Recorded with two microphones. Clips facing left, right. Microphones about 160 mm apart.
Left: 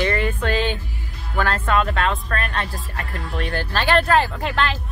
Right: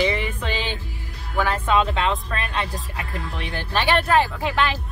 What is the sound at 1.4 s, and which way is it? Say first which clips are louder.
Speech: even; 15° right (ahead or behind).